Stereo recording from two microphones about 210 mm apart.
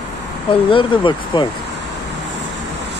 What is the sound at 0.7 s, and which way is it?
Speech, 25° left (ahead or behind).